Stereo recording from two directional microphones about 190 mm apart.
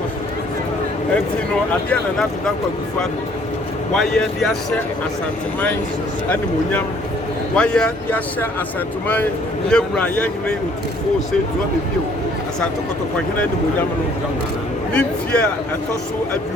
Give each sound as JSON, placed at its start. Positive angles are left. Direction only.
{"t": 3.9, "sound": "speech", "side_deg": 5}
{"t": 6.3, "sound": "speech", "side_deg": 10}
{"t": 9.6, "sound": "speech", "side_deg": 5}
{"t": 14.9, "sound": "speech", "side_deg": 5}